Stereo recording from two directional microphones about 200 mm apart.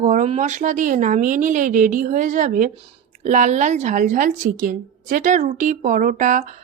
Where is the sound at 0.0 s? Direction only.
35° right (ahead or behind).